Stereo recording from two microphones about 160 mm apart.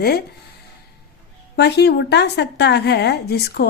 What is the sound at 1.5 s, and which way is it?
A woman's voice, 90° left.